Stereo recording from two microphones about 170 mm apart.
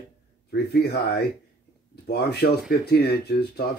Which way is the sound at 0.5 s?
70° left (ahead or behind).